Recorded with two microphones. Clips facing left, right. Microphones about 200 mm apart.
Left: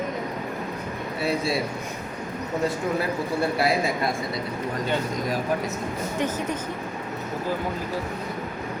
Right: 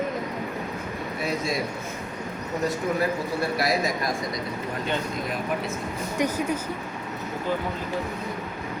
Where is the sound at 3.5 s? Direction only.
30° left (ahead or behind).